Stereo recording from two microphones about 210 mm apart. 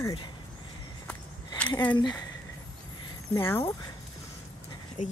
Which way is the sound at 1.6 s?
5° left (ahead or behind).